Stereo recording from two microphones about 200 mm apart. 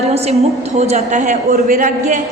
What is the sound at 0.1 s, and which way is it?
A man's voice, 30° right (ahead or behind).